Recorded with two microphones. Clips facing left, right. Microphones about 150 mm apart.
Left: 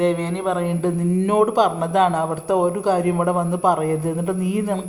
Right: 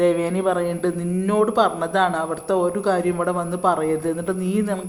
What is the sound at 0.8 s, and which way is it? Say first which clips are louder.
A man's voice: left 2 dB; 15° left (ahead or behind).